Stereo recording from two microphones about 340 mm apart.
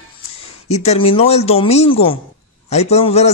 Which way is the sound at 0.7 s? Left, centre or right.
Centre.